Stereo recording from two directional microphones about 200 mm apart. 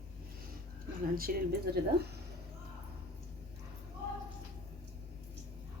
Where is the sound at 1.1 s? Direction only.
50° right (ahead or behind).